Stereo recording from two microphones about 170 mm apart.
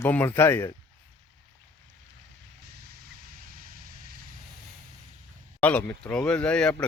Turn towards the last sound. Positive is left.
turn(degrees=5)  # may be behind; listen again after turning